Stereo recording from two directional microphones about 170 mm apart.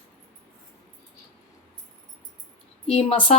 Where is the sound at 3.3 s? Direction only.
40° left (ahead or behind).